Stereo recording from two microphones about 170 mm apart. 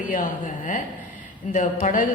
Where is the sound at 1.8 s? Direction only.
50° left (ahead or behind).